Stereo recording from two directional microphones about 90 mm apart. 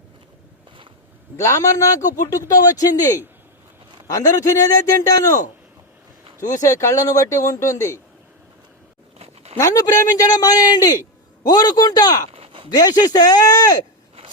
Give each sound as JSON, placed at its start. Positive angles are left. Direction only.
{"t": 1.4, "sound": "a man's voice", "side_deg": 35}
{"t": 6.6, "sound": "a man's voice", "side_deg": 35}
{"t": 9.6, "sound": "a man's voice", "side_deg": 40}
{"t": 12.3, "sound": "a sound", "side_deg": -90}
{"t": 12.7, "sound": "a man's voice", "side_deg": 50}